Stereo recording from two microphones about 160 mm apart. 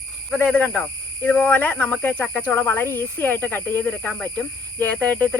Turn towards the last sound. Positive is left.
turn(degrees=10)  # may be behind; listen again after turning